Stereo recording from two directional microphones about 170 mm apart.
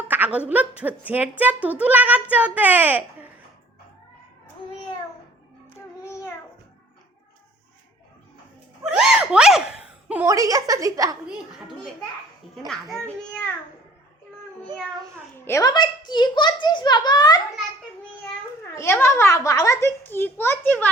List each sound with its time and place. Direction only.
0.1 s a woman's voice: 10° right (ahead or behind)
8.8 s a sound: 5° right (ahead or behind)
10.2 s a woman's voice: 20° right (ahead or behind)
12.6 s a child's voice: centre (ahead or behind)
15.4 s a child's voice: 15° left (ahead or behind)
18.7 s a child's voice: 15° left (ahead or behind)